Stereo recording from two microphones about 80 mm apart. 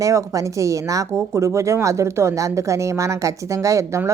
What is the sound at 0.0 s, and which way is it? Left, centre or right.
Speech, right.